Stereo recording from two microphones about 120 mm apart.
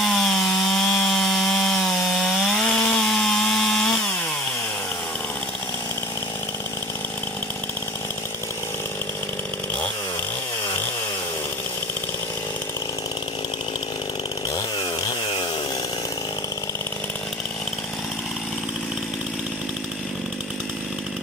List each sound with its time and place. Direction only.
0.0 s wood: 5° left (ahead or behind)
15.0 s chainsaw: 40° left (ahead or behind)